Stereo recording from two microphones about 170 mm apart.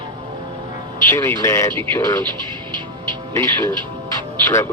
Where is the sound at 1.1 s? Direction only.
20° left (ahead or behind).